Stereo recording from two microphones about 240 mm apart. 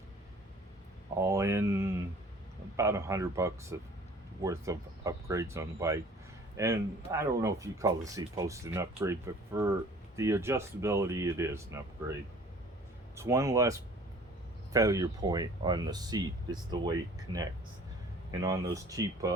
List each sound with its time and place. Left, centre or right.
1.2 s speech: centre
13.1 s speech: centre